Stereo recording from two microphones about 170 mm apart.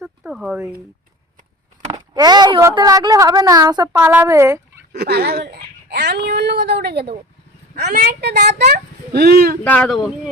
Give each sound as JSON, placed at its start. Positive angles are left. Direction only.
{"t": 0.0, "sound": "a sound", "side_deg": -5}
{"t": 1.9, "sound": "speech", "side_deg": -25}
{"t": 4.9, "sound": "speech", "side_deg": -70}
{"t": 9.6, "sound": "speech", "side_deg": 5}